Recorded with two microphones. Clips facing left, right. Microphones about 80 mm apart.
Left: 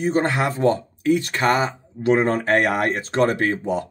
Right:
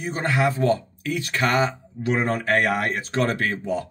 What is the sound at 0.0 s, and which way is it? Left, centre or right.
Speech, left.